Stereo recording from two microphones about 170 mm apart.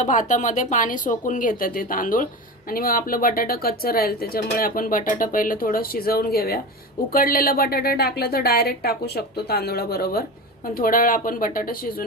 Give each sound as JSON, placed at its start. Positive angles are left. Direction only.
{"t": 0.0, "sound": "speech", "side_deg": 50}